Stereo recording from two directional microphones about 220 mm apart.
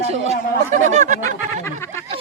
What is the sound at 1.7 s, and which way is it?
Speech, 10° left (ahead or behind).